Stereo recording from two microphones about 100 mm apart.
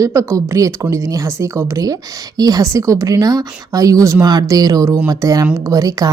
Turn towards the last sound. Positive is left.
turn(degrees=-40)  # may be behind; listen again after turning